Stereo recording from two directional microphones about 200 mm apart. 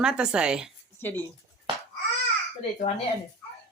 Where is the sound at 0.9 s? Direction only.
10° left (ahead or behind).